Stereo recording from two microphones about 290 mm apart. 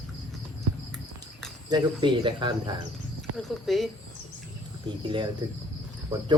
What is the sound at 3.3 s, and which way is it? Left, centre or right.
Speech, centre.